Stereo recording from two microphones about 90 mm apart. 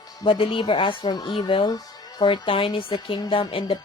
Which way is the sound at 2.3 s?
70° left (ahead or behind).